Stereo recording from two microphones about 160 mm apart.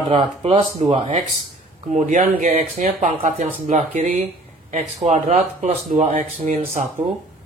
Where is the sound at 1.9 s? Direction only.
50° right (ahead or behind).